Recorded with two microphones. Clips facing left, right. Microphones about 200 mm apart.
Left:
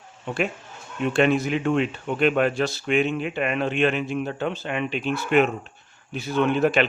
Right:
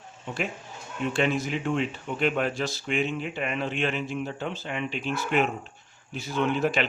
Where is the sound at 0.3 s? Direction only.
60° left (ahead or behind).